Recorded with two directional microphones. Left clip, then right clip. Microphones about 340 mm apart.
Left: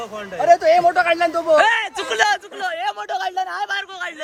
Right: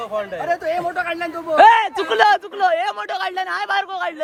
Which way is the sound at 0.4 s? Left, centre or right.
Left.